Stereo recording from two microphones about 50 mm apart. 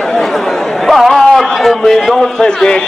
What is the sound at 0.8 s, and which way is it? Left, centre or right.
A man's voice, centre.